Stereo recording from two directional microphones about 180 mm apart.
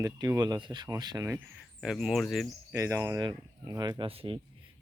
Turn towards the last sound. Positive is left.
turn(degrees=-30)  # may be behind; listen again after turning